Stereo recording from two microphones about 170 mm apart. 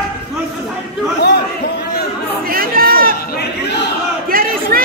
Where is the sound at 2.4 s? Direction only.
60° right (ahead or behind).